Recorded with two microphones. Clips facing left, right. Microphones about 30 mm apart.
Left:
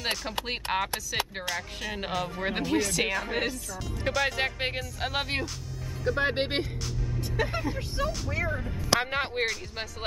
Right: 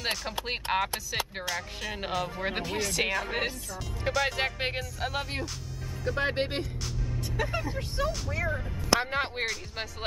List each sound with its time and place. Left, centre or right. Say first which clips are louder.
0.0 s speech: left 1 dB; centre
5.0 s speech: left 4 dB; left
6.0 s speech: left 2 dB; centre
6.3 s speech: left 2 dB; left
7.5 s speech: left 1 dB; centre